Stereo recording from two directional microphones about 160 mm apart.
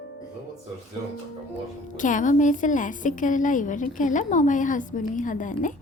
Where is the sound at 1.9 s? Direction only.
55° left (ahead or behind).